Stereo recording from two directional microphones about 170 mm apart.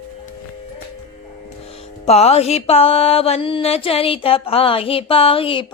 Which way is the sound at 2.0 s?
40° left (ahead or behind).